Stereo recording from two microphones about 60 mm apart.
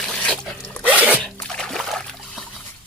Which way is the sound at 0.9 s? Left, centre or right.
Right.